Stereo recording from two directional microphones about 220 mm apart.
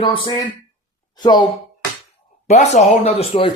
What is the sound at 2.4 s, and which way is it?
Speech, 30° left (ahead or behind).